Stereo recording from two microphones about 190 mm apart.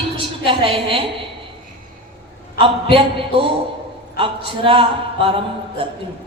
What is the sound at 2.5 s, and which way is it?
A woman's voice, 30° right (ahead or behind).